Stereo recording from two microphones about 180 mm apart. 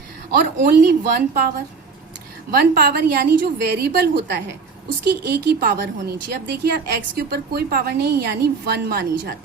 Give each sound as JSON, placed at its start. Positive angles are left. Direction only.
{"t": 0.3, "sound": "a woman's voice", "side_deg": -50}